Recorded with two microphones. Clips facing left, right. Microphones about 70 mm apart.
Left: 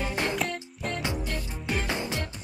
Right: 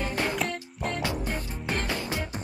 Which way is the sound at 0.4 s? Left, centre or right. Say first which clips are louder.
Right 1 dB; centre.